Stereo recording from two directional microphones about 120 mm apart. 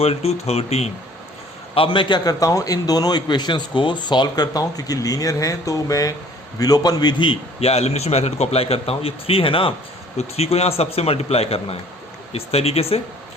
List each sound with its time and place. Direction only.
0.0 s a man's voice: 60° left (ahead or behind)
1.7 s a man's voice: 45° left (ahead or behind)
10.2 s a man's voice: 60° left (ahead or behind)